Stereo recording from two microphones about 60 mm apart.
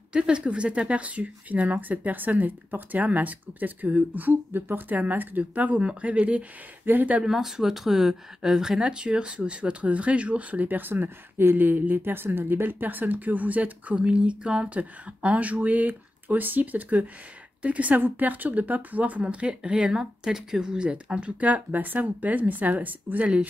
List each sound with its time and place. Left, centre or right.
0.1 s speech: centre
7.2 s speech: centre; by 23.4 s right